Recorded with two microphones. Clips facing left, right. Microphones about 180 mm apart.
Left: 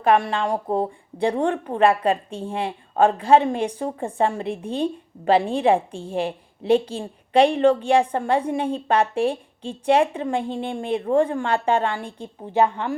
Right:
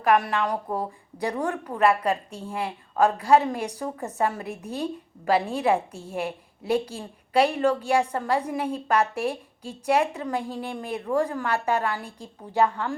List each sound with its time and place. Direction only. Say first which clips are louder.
0.0 s a woman's voice: left 3 dB; 25° left (ahead or behind)